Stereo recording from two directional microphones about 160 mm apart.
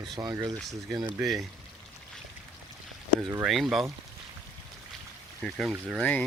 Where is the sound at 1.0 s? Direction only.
5° right (ahead or behind).